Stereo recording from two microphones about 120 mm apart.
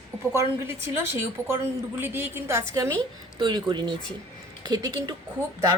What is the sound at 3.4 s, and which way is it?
Speech, 40° right (ahead or behind).